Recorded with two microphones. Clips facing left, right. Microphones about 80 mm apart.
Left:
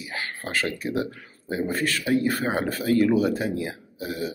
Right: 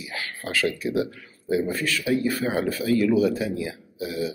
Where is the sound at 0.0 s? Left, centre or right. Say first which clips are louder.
Left 1 dB; left.